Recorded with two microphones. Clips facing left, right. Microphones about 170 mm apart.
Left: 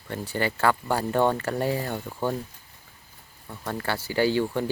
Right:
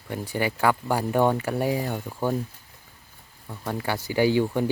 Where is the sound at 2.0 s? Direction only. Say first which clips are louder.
Right 2 dB; centre (ahead or behind).